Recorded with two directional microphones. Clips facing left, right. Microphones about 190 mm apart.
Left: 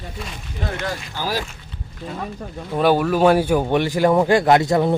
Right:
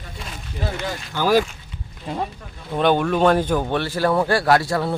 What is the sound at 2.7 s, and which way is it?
Speech, 5° left (ahead or behind).